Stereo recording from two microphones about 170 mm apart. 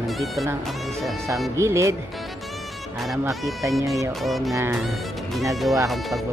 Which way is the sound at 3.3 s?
Centre (ahead or behind).